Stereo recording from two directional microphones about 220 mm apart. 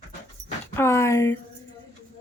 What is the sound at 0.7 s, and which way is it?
Speech, 10° left (ahead or behind).